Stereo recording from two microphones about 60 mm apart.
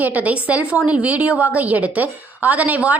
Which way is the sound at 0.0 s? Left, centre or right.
Right.